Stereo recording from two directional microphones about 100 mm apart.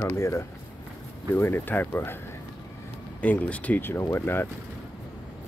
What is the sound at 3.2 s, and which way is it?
Speech, 15° left (ahead or behind).